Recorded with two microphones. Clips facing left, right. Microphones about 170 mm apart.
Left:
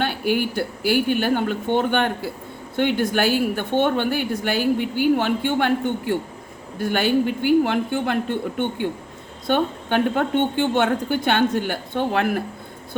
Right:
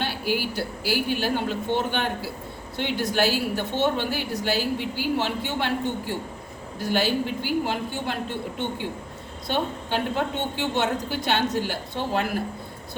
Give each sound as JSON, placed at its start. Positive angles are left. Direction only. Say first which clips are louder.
{"t": 0.0, "sound": "a woman's voice", "louder": "left 5 dB", "side_deg": 55}